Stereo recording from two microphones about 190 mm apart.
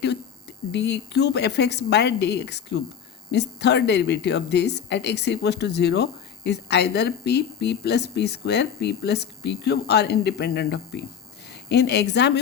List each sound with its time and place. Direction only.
0.7 s a woman's voice: 65° left (ahead or behind)